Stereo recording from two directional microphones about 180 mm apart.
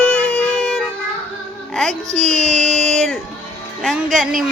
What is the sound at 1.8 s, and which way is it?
Speech, centre (ahead or behind).